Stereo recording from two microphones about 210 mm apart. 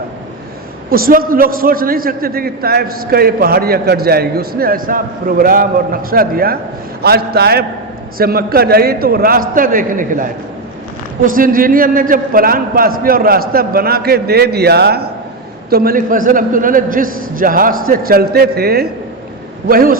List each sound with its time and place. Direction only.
0.9 s a man's voice: 45° right (ahead or behind)